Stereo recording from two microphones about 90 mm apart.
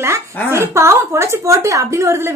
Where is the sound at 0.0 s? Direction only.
30° right (ahead or behind).